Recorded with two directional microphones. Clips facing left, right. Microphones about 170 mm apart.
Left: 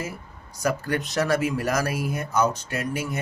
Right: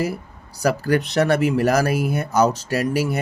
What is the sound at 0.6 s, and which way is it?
Speech, 75° right (ahead or behind).